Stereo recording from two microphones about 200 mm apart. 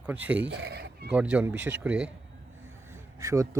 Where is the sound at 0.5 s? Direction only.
55° right (ahead or behind).